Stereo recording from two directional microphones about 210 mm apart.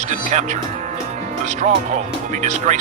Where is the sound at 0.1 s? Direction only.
35° right (ahead or behind).